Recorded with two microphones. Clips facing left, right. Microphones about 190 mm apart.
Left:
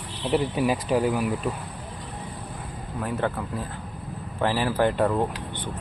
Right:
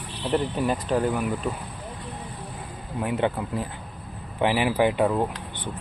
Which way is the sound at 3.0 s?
20° right (ahead or behind).